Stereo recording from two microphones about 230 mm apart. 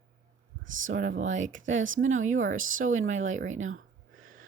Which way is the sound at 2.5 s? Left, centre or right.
Right.